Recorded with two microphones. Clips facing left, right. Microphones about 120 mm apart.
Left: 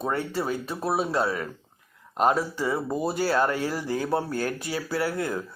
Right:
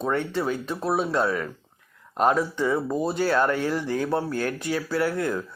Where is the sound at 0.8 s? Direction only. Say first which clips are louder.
Right 1 dB; 5° left (ahead or behind).